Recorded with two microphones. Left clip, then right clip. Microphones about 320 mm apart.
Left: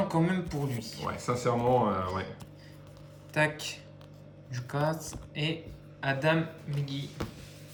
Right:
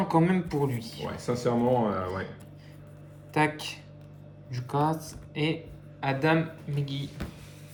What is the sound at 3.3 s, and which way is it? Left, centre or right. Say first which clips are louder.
A man's voice: right 2 dB; centre.